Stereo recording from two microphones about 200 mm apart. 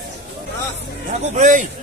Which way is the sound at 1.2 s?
40° right (ahead or behind).